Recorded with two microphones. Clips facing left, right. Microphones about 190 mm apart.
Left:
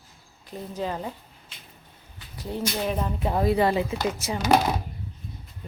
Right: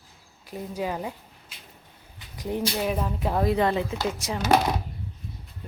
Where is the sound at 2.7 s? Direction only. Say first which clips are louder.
Even; 5° right (ahead or behind).